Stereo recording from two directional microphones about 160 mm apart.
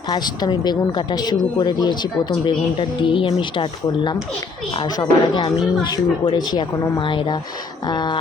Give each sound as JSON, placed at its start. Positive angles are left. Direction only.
{"t": 0.1, "sound": "speech", "side_deg": 25}